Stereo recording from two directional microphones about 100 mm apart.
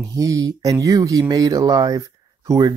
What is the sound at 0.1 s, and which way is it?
Speech, 35° right (ahead or behind).